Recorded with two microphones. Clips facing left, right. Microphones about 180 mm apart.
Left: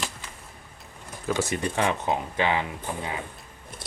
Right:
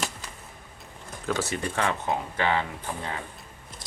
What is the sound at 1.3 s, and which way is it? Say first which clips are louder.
Speech: left 2 dB; 15° left (ahead or behind).